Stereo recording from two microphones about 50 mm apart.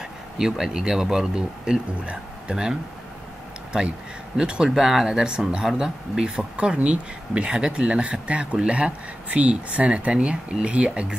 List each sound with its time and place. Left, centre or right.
0.4 s speech: centre
4.4 s speech: centre